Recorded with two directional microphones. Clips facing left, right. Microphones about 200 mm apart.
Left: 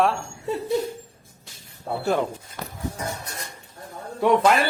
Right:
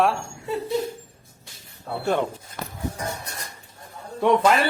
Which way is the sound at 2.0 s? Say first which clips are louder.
Even; 5° left (ahead or behind).